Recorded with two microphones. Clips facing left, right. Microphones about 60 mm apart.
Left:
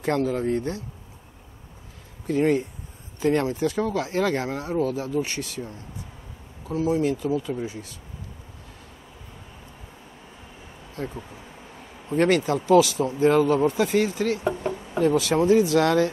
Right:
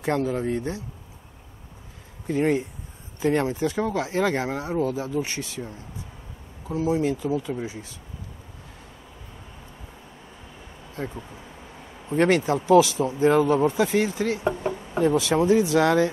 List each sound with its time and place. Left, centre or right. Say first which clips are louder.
0.0 s speech: left 1 dB; right
2.2 s speech: left 1 dB; right
12.2 s speech: even; right